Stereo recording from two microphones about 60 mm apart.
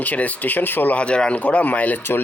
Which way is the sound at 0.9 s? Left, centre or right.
Centre.